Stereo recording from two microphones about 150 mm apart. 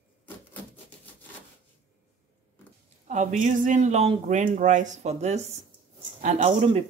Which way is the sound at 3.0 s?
55° right (ahead or behind).